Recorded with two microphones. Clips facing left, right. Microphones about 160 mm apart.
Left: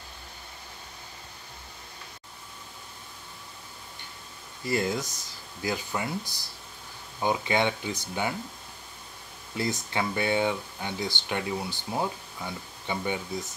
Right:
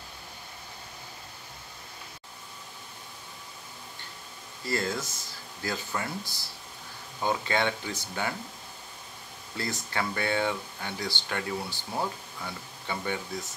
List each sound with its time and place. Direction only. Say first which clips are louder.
4.6 s speech: left 3 dB; 15° left (ahead or behind)
9.6 s speech: left 3 dB; 20° left (ahead or behind)